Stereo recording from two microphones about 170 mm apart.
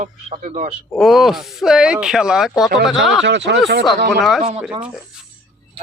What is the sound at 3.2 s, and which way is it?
Speech, 90° right.